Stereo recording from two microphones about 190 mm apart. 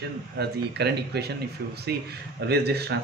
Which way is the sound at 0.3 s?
60° right (ahead or behind).